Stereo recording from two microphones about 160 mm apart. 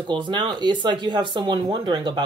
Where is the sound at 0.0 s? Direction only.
30° right (ahead or behind).